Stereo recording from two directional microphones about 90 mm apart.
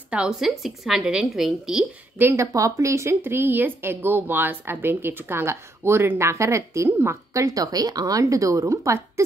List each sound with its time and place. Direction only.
0.1 s a woman's voice: 10° right (ahead or behind)
2.1 s speech: 30° right (ahead or behind)